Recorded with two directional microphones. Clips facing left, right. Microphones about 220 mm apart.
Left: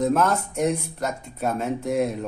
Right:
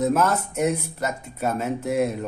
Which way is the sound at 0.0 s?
5° right (ahead or behind).